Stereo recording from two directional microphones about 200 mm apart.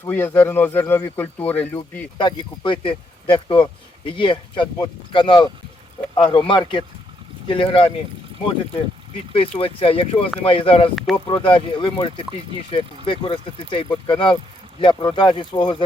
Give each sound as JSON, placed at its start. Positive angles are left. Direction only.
{"t": 0.0, "sound": "speech", "side_deg": 10}
{"t": 2.1, "sound": "speech", "side_deg": 25}
{"t": 9.3, "sound": "speech", "side_deg": 30}
{"t": 10.9, "sound": "speech", "side_deg": 0}
{"t": 11.3, "sound": "speech", "side_deg": 25}